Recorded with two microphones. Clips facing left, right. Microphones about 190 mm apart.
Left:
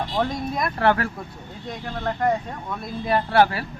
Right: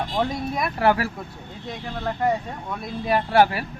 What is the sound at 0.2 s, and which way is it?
Speech, 10° right (ahead or behind).